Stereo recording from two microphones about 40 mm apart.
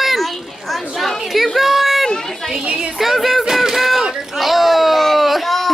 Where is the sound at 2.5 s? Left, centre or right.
Right.